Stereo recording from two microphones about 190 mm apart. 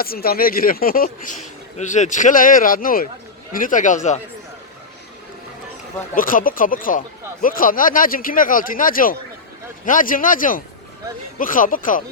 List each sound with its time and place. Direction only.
0.0 s speech: 50° left (ahead or behind)
6.1 s speech: 45° left (ahead or behind)